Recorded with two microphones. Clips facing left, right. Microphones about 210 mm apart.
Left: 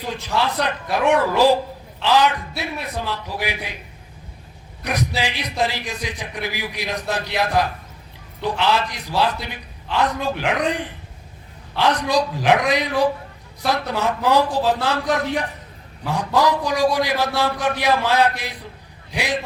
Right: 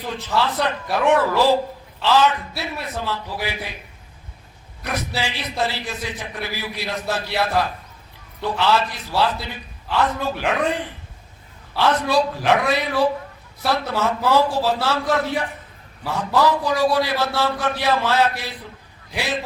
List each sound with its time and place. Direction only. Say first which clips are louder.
0.1 s a man's voice: even; 15° left (ahead or behind)
4.8 s a man's voice: left 2 dB; 15° left (ahead or behind)
16.0 s a man's voice: even; 15° left (ahead or behind)